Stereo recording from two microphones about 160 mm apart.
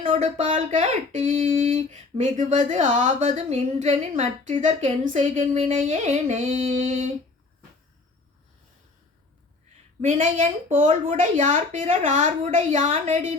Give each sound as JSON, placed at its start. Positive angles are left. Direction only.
{"t": 0.1, "sound": "speech", "side_deg": -50}
{"t": 1.5, "sound": "a sound", "side_deg": -45}
{"t": 2.6, "sound": "speech", "side_deg": -40}
{"t": 10.1, "sound": "speech", "side_deg": -50}